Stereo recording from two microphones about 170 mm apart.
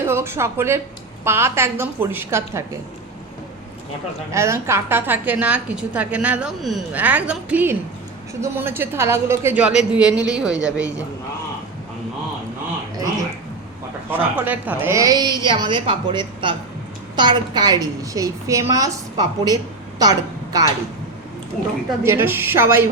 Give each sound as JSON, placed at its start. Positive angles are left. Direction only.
{"t": 0.0, "sound": "a woman's voice", "side_deg": -15}
{"t": 4.3, "sound": "a woman's voice", "side_deg": -15}
{"t": 14.1, "sound": "a woman's voice", "side_deg": -10}
{"t": 22.0, "sound": "a woman's voice", "side_deg": -15}